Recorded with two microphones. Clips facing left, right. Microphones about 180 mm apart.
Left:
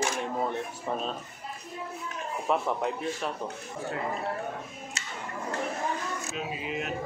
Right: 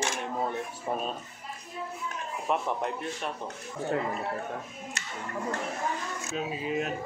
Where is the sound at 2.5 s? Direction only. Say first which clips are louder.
Left 2 dB; centre (ahead or behind).